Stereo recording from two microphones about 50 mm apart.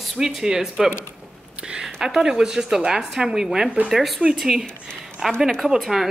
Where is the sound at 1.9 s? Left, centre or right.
Centre.